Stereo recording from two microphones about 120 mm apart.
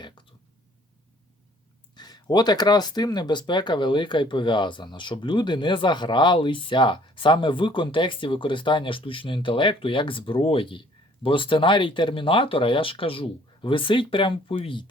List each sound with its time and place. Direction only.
2.0 s speech: 35° left (ahead or behind)